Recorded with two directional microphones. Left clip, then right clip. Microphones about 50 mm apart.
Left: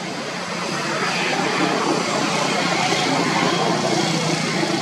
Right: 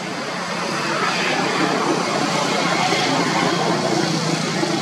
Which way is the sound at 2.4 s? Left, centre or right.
Centre.